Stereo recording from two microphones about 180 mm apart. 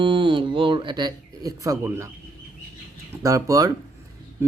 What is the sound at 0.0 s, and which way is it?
Speech, 25° right (ahead or behind).